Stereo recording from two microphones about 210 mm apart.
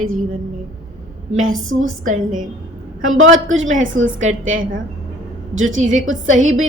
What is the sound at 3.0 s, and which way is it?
A woman's voice, 70° right (ahead or behind).